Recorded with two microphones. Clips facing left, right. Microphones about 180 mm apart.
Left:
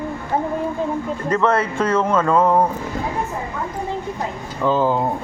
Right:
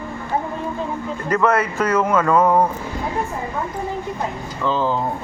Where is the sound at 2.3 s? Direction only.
10° left (ahead or behind).